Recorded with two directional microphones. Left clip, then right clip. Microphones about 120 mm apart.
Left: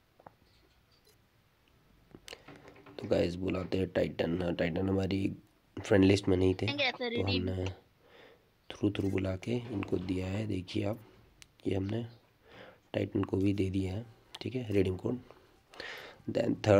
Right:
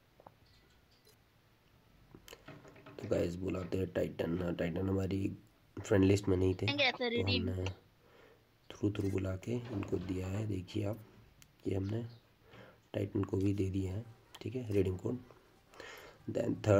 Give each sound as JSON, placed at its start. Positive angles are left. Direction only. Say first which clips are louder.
{"t": 2.2, "sound": "speech", "louder": "left 4 dB", "side_deg": 20}
{"t": 6.6, "sound": "speech", "louder": "even", "side_deg": 0}
{"t": 7.7, "sound": "a sound", "louder": "left 4 dB", "side_deg": 25}
{"t": 9.1, "sound": "speech", "louder": "left 4 dB", "side_deg": 20}
{"t": 12.5, "sound": "a sound", "louder": "left 5 dB", "side_deg": 25}
{"t": 13.5, "sound": "speech", "louder": "left 4 dB", "side_deg": 20}